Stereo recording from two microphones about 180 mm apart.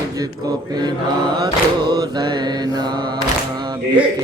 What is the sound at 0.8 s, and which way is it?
Mantra, 25° right (ahead or behind).